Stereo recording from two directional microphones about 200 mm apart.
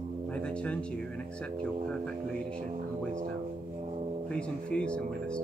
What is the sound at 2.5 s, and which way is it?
Speech, 35° right (ahead or behind).